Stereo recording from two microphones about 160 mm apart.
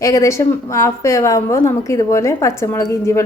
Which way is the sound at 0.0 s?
20° left (ahead or behind).